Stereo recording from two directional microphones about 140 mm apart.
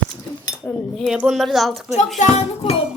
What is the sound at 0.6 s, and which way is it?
A child's voice, centre (ahead or behind).